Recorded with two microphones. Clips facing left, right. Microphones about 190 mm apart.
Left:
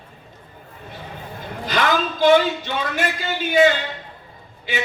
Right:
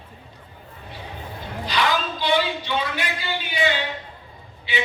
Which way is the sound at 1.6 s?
45° left (ahead or behind).